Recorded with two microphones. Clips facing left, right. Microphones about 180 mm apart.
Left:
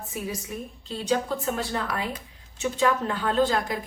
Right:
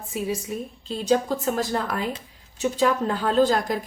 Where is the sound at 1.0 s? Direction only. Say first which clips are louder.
Right 4 dB; 40° right (ahead or behind).